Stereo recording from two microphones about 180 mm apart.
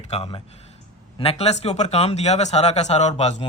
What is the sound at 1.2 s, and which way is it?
Speech, 35° left (ahead or behind).